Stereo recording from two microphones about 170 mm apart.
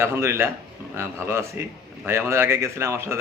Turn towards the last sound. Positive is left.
turn(degrees=-15)  # may be behind; listen again after turning